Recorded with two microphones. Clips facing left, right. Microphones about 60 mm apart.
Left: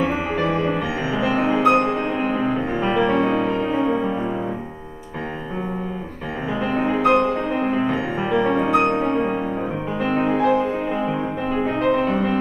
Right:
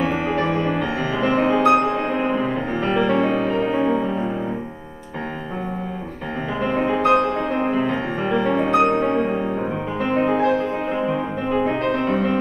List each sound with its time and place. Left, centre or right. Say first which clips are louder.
0.0 s music: even; centre
6.7 s music: even; centre